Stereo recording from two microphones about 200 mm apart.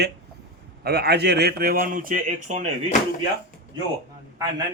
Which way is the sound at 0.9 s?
55° right (ahead or behind).